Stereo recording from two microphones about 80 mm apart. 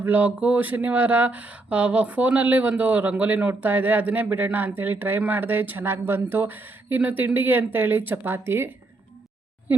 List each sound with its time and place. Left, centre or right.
0.0 s speech: right